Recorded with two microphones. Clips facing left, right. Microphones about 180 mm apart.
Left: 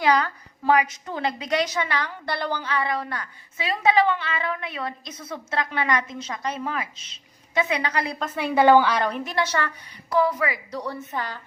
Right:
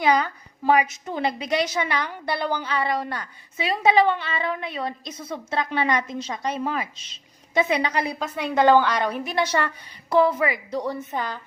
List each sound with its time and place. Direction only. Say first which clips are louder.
0.0 s a woman's voice: even; 20° right (ahead or behind)
2.8 s a woman's voice: right 2 dB; 25° right (ahead or behind)
7.5 s a woman's voice: right 2 dB; 15° right (ahead or behind)
8.2 s a woman's voice: left 1 dB; 5° left (ahead or behind)
9.2 s a woman's voice: right 2 dB; 15° right (ahead or behind)